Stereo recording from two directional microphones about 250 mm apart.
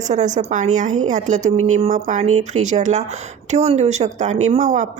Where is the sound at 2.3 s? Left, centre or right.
Right.